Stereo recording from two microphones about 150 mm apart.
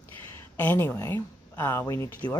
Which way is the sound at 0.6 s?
15° left (ahead or behind).